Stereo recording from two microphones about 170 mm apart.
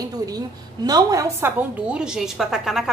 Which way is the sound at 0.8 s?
20° right (ahead or behind).